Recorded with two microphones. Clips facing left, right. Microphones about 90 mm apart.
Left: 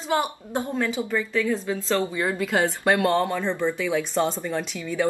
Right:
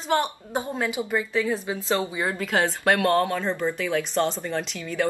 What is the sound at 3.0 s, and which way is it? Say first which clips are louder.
Speech: even; 15° left (ahead or behind).